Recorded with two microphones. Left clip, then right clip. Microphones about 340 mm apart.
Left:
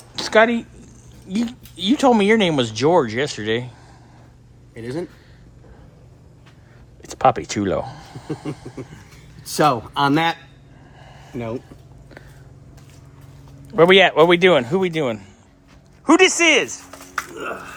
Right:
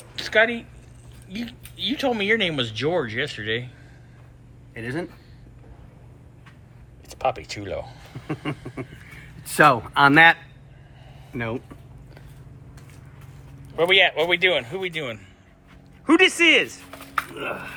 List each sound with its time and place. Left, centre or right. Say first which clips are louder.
0.3 s speech: left 4 dB; left
1.3 s speech: left 9 dB; left
4.7 s speech: left 2 dB; centre
7.2 s speech: left 8 dB; left
9.6 s speech: right 2 dB; centre
11.3 s speech: even; centre
13.7 s speech: left 6 dB; left
16.0 s speech: left 3 dB; centre